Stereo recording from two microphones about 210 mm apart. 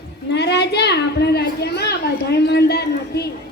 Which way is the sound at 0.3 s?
55° left (ahead or behind).